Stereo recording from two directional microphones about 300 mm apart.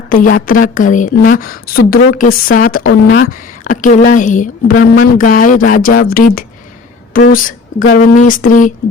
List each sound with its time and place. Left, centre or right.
0.1 s a woman's voice: left